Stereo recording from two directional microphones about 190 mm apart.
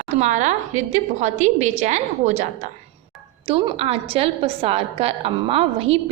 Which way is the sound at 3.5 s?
25° right (ahead or behind).